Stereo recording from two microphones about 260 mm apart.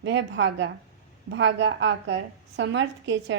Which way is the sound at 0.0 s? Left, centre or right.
Right.